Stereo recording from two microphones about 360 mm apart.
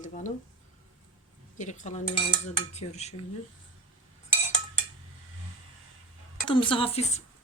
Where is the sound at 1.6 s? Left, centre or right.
Centre.